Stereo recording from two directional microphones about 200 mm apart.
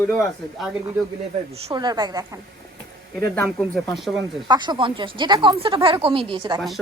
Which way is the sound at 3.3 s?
10° left (ahead or behind).